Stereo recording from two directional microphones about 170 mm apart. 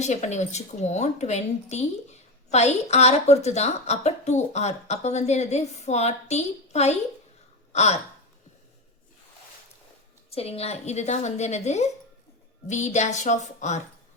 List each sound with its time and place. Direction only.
0.0 s a woman's voice: 45° left (ahead or behind)
7.7 s a sound: 40° left (ahead or behind)
10.2 s a woman's voice: 35° left (ahead or behind)